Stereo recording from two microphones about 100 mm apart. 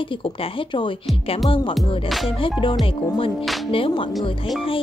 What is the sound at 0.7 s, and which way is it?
Speech, 60° left (ahead or behind).